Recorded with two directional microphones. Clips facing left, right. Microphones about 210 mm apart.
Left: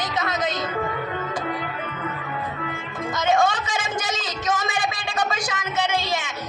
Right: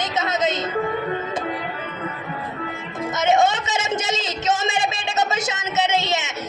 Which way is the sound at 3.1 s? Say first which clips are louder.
Right 2 dB; 25° right (ahead or behind).